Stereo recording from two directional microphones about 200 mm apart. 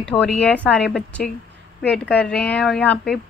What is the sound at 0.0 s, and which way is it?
A woman's voice, 5° left (ahead or behind).